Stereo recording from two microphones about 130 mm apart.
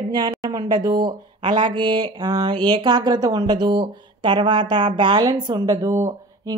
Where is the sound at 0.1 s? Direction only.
35° right (ahead or behind).